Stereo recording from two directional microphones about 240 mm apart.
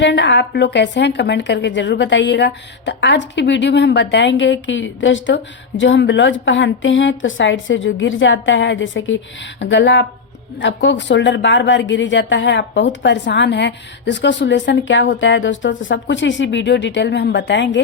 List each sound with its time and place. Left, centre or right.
0.0 s a woman's voice: left